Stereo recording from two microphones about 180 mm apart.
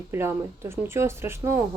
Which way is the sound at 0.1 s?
15° right (ahead or behind).